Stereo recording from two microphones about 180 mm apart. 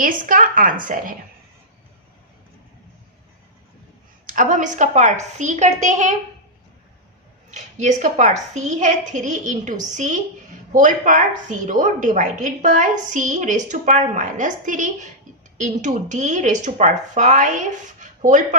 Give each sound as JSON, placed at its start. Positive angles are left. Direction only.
{"t": 0.0, "sound": "a woman's voice", "side_deg": -50}
{"t": 4.3, "sound": "a woman's voice", "side_deg": -45}
{"t": 7.5, "sound": "a woman's voice", "side_deg": -40}